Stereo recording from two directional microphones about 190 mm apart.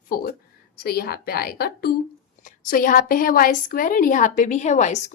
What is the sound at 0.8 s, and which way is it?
A woman's voice, 55° left (ahead or behind).